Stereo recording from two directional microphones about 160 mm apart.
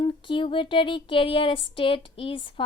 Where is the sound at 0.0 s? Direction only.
30° left (ahead or behind).